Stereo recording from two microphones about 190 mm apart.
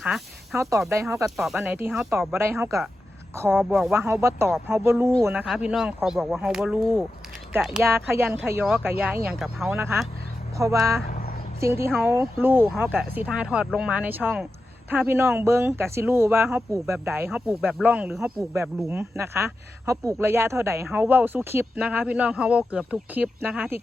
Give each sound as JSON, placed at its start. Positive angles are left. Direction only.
{"t": 0.5, "sound": "speech", "side_deg": -15}
{"t": 1.4, "sound": "speech", "side_deg": 0}
{"t": 2.1, "sound": "speech", "side_deg": -15}
{"t": 3.5, "sound": "speech", "side_deg": 0}
{"t": 3.9, "sound": "speech", "side_deg": -10}
{"t": 7.8, "sound": "speech", "side_deg": -15}
{"t": 9.7, "sound": "speech", "side_deg": -15}